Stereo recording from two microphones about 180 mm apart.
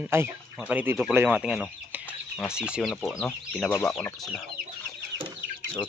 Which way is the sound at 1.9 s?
10° right (ahead or behind).